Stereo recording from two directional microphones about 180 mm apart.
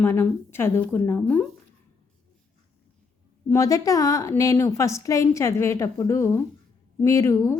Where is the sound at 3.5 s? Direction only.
20° left (ahead or behind).